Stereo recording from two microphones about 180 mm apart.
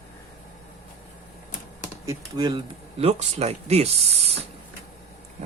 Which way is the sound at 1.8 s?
20° right (ahead or behind).